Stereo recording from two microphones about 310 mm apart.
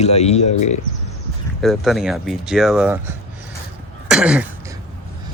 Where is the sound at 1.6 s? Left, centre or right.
Centre.